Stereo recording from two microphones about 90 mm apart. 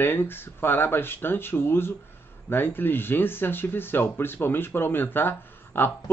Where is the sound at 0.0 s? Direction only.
25° left (ahead or behind).